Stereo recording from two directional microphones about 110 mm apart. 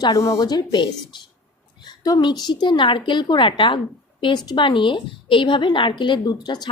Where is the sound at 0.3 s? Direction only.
40° left (ahead or behind).